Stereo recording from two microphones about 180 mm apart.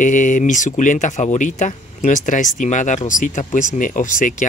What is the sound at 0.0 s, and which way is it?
Speech, 45° left (ahead or behind).